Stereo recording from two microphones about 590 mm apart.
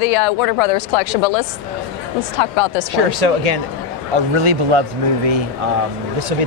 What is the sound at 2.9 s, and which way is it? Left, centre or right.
Speech, right.